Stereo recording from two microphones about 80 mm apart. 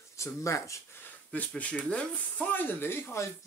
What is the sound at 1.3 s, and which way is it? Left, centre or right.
Speech, centre.